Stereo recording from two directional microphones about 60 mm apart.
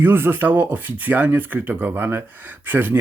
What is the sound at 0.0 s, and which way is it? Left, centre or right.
Speech, right.